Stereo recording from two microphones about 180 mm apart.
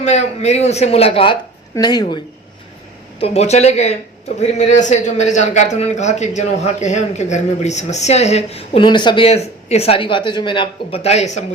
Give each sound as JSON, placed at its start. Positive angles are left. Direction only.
{"t": 0.0, "sound": "a man's voice", "side_deg": 40}
{"t": 3.2, "sound": "a man's voice", "side_deg": 35}